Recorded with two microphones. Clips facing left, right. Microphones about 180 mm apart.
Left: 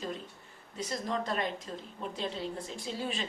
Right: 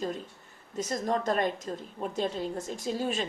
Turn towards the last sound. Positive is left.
turn(degrees=-45)  # may be behind; listen again after turning